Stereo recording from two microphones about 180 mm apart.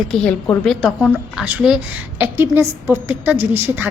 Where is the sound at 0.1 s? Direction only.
5° left (ahead or behind).